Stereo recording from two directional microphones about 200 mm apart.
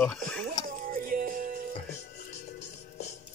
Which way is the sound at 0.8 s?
45° right (ahead or behind).